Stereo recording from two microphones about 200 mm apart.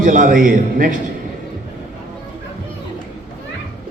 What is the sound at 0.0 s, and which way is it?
Speech, 40° right (ahead or behind).